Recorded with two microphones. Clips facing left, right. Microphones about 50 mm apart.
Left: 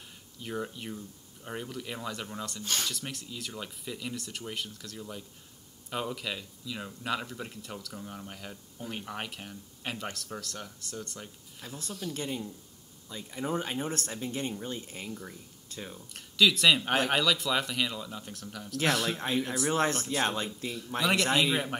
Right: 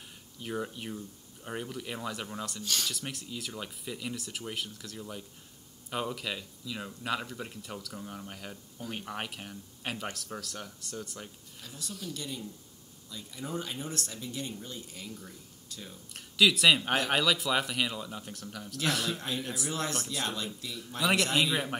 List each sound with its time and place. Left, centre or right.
0.4 s speech: centre
2.6 s speech: left
2.9 s speech: centre
11.6 s speech: left
16.1 s speech: centre
19.0 s speech: left
21.4 s speech: centre